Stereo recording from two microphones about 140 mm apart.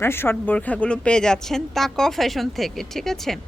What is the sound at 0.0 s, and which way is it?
A woman's voice, 15° left (ahead or behind).